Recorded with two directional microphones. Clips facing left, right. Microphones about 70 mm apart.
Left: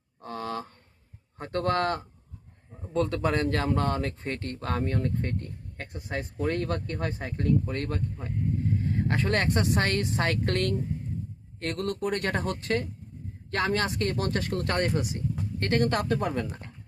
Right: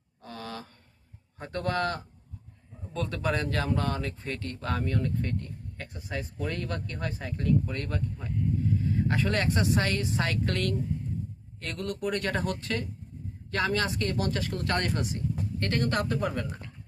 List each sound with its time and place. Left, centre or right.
0.2 s a sound: left
1.4 s speech: left
2.9 s speech: left
8.8 s vehicle: left
9.3 s speech: left
14.8 s speech: left